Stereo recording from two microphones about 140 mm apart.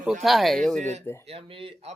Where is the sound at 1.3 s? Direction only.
45° right (ahead or behind).